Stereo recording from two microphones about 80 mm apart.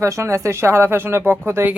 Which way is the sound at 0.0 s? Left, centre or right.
Right.